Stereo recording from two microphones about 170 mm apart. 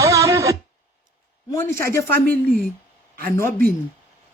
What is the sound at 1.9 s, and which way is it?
Speech, 15° left (ahead or behind).